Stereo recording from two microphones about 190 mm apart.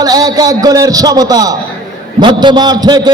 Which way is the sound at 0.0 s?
20° right (ahead or behind).